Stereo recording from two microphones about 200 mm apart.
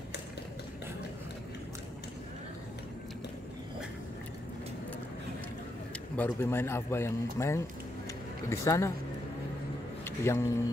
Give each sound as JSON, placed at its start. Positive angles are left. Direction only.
{"t": 6.1, "sound": "speech", "side_deg": 10}
{"t": 10.0, "sound": "speech", "side_deg": 15}